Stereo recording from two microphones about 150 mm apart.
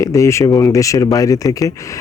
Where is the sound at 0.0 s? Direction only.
20° left (ahead or behind).